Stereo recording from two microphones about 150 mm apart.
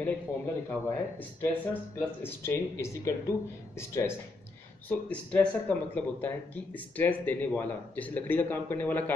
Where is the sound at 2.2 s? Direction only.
15° left (ahead or behind).